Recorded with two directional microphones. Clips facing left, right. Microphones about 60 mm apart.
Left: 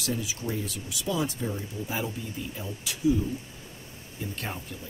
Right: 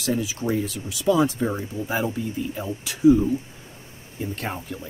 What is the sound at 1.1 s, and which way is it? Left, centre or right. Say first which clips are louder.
Speech: right 9 dB; right.